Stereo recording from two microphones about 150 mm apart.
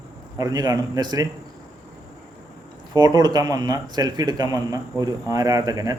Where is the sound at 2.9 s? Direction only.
25° right (ahead or behind).